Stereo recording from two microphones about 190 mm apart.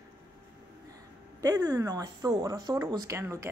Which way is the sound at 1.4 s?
20° right (ahead or behind).